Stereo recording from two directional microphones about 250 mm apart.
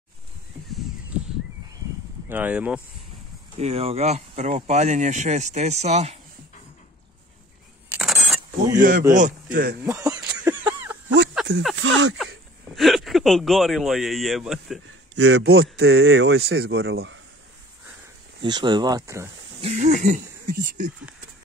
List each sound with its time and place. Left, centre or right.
1.1 s a sound: centre
2.2 s speech: centre
3.5 s speech: right
7.9 s a sound: centre
8.7 s a man's voice: right
9.8 s a sound: centre
11.7 s speech: right
12.7 s speech: centre
15.1 s a man's voice: right
15.4 s a man's voice: right
15.8 s speech: right
18.4 s speech: centre
19.6 s speech: right